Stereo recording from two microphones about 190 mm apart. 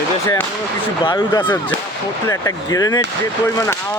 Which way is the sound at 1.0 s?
20° left (ahead or behind).